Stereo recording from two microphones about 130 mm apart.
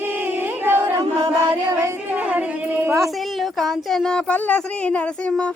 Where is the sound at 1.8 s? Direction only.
10° right (ahead or behind).